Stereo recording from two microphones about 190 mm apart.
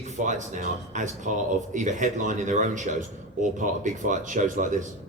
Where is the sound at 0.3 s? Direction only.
40° right (ahead or behind).